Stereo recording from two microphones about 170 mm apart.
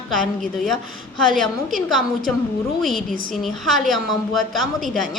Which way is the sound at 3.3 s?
Centre (ahead or behind).